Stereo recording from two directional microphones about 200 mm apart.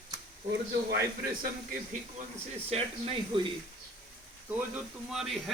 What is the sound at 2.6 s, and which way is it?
Speech, 30° right (ahead or behind).